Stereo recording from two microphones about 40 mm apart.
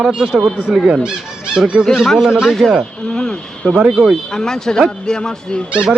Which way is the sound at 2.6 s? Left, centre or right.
Centre.